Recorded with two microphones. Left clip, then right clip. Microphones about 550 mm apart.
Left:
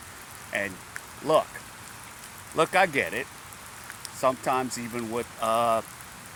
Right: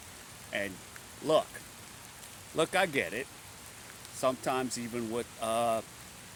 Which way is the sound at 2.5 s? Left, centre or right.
Right.